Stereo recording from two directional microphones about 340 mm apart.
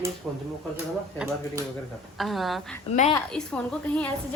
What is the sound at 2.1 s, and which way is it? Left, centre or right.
Speech, centre.